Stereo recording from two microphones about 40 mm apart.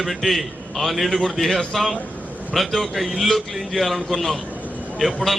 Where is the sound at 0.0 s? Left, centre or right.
Centre.